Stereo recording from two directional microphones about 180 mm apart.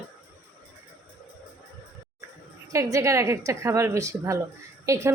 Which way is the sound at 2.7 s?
20° right (ahead or behind).